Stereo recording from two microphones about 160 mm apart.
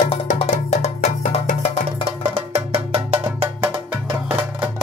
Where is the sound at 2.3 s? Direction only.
40° right (ahead or behind).